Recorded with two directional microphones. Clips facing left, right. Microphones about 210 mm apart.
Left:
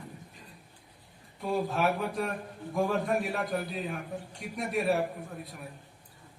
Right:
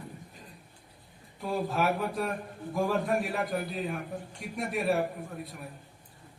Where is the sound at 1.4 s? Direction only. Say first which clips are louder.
Left 1 dB; centre (ahead or behind).